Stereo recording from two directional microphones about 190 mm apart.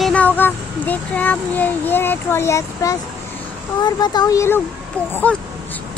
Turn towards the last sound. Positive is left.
turn(degrees=5)  # may be behind; listen again after turning